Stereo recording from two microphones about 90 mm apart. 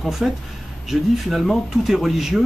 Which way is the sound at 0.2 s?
5° right (ahead or behind).